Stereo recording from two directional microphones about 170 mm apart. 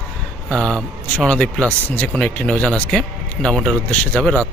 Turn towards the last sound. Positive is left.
turn(degrees=5)  # may be behind; listen again after turning